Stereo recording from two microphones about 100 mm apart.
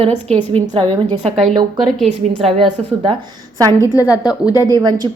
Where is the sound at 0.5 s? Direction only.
60° right (ahead or behind).